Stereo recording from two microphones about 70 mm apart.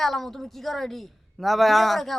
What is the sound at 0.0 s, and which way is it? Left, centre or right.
A man's voice, centre.